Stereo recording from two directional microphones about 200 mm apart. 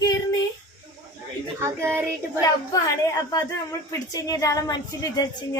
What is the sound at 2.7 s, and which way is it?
A woman's voice, 15° left (ahead or behind).